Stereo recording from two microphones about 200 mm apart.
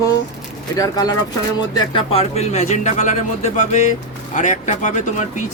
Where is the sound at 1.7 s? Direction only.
25° left (ahead or behind).